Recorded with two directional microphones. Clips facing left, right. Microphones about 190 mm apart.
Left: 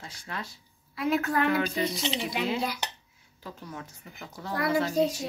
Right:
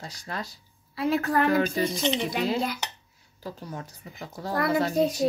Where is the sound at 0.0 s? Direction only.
40° right (ahead or behind).